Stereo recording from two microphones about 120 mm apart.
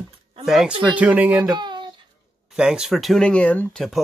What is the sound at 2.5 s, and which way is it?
Speech, 5° right (ahead or behind).